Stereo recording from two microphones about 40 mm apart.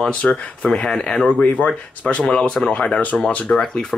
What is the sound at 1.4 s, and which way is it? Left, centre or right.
Speech, left.